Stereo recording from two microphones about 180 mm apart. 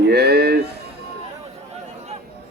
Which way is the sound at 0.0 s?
65° right (ahead or behind).